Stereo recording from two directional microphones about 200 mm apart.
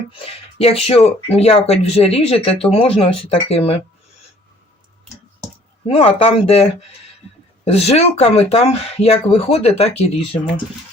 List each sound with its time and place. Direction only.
0.6 s speech: 30° left (ahead or behind)
5.9 s speech: 30° left (ahead or behind)